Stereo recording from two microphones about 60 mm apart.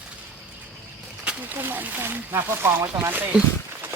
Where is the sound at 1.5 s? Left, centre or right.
Right.